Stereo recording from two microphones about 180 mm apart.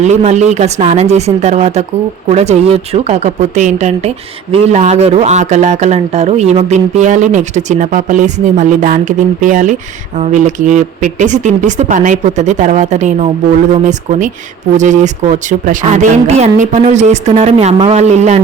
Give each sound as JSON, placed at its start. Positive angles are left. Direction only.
{"t": 0.0, "sound": "speech", "side_deg": -40}